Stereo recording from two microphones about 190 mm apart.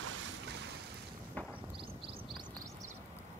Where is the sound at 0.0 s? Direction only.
90° right.